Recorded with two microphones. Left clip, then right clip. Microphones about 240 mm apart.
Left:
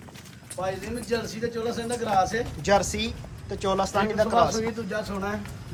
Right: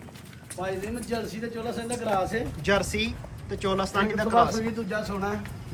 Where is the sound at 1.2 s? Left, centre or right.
Left.